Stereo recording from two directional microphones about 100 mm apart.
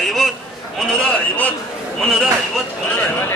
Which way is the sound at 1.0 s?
15° left (ahead or behind).